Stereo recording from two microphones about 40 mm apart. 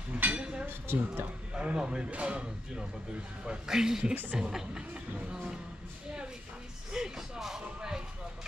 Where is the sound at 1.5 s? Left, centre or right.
Right.